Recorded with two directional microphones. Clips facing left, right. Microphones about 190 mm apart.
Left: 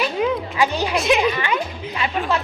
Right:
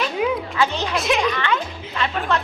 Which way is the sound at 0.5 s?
10° left (ahead or behind).